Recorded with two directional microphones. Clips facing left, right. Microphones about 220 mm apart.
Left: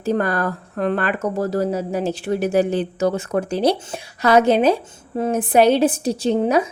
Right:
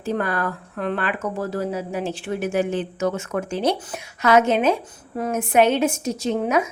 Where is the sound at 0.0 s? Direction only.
40° left (ahead or behind).